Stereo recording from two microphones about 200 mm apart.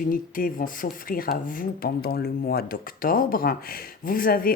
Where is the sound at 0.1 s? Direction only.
45° left (ahead or behind).